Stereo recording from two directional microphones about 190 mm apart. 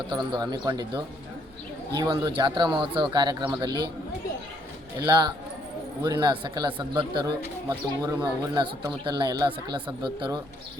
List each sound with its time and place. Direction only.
0.1 s speech: 20° right (ahead or behind)
4.9 s speech: 20° right (ahead or behind)